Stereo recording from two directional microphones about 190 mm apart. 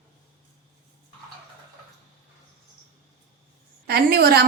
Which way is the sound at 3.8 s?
55° right (ahead or behind).